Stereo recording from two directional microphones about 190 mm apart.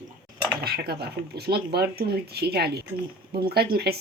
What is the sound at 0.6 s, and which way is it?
Speech, 55° right (ahead or behind).